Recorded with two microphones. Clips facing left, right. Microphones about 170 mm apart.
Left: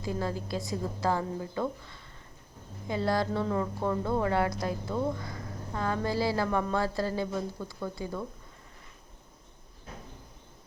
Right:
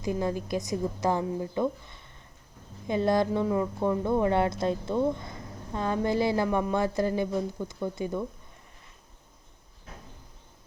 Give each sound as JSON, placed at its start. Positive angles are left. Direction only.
{"t": 0.0, "sound": "speech", "side_deg": -20}